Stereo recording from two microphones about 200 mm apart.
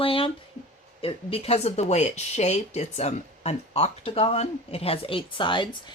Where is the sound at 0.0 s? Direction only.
25° left (ahead or behind).